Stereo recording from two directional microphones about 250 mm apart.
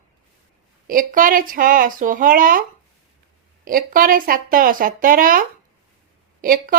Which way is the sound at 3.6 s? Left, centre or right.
Right.